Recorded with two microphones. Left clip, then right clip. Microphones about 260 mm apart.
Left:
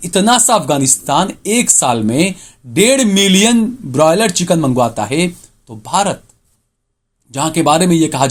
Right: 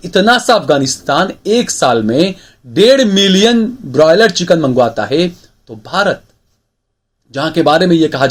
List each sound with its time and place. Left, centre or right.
0.3 s speech: left
5.1 s a sound: left
5.9 s speech: left
7.3 s speech: left